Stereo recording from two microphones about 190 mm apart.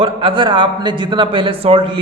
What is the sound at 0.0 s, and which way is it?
A man's voice, 30° right (ahead or behind).